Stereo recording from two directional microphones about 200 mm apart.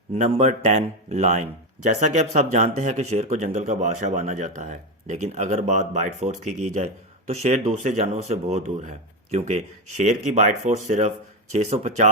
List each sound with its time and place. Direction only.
0.1 s speech: 35° right (ahead or behind)